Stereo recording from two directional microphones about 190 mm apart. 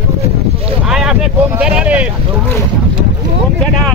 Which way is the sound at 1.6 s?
5° right (ahead or behind).